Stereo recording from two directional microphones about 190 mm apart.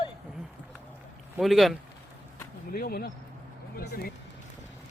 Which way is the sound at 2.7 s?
50° left (ahead or behind).